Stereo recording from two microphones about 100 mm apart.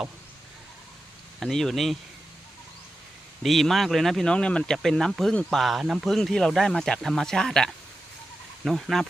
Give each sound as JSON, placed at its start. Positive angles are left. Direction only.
{"t": 1.4, "sound": "speech", "side_deg": 0}
{"t": 3.4, "sound": "speech", "side_deg": 0}